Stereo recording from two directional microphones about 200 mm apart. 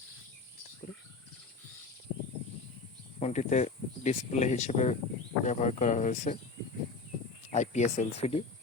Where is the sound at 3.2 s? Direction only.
35° left (ahead or behind).